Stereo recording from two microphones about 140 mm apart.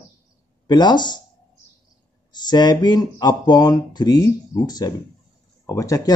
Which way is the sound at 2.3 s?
30° left (ahead or behind).